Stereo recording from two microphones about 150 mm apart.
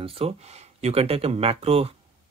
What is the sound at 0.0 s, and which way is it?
Speech, 40° right (ahead or behind).